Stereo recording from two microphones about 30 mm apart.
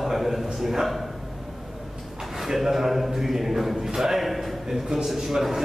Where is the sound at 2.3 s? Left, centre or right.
Centre.